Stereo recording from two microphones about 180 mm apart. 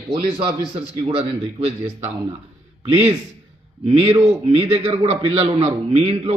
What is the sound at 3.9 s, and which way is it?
A man's voice, 35° right (ahead or behind).